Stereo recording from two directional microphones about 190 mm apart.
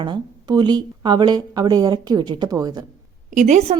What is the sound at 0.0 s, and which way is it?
Speech, 25° right (ahead or behind).